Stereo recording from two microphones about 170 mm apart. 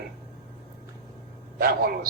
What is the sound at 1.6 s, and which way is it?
Speech, 60° right (ahead or behind).